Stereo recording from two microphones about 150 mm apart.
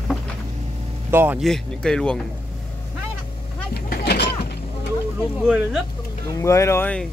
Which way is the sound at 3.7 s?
90° left.